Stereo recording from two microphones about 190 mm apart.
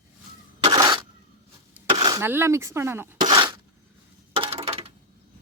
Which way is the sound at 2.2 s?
10° right (ahead or behind).